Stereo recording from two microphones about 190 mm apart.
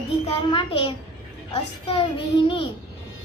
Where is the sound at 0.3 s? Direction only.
30° left (ahead or behind).